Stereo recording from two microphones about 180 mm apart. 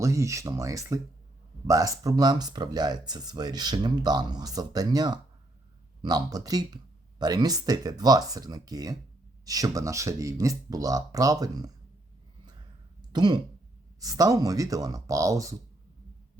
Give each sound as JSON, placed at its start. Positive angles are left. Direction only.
{"t": 0.0, "sound": "speech", "side_deg": -15}
{"t": 13.1, "sound": "speech", "side_deg": -25}